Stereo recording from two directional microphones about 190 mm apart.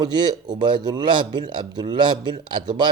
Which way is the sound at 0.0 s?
20° right (ahead or behind).